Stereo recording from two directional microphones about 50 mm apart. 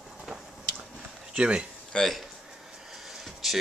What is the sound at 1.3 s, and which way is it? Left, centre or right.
Speech, centre.